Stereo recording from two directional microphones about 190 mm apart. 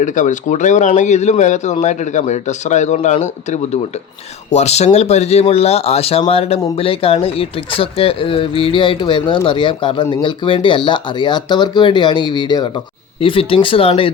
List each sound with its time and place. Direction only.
0.0 s speech: 40° left (ahead or behind)